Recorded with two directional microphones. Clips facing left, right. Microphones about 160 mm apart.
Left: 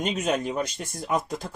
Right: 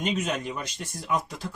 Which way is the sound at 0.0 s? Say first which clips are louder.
Left 3 dB; 45° left (ahead or behind).